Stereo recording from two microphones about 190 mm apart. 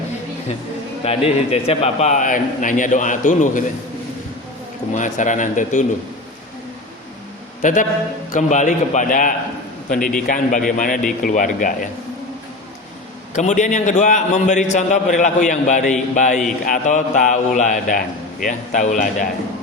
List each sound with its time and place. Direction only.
1.0 s a man's voice: 30° left (ahead or behind)
4.9 s a man's voice: 40° left (ahead or behind)
7.6 s a man's voice: 40° left (ahead or behind)
13.3 s a man's voice: 40° left (ahead or behind)